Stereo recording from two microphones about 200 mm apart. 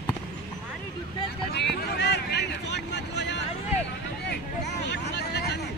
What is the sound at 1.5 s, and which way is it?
Vehicle, 60° left (ahead or behind).